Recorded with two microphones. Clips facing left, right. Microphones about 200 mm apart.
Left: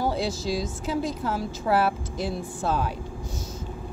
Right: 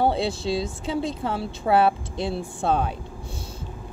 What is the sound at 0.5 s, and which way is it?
A woman's voice, 25° right (ahead or behind).